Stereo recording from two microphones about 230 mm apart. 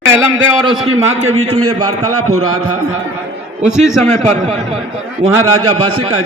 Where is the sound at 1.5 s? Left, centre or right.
Right.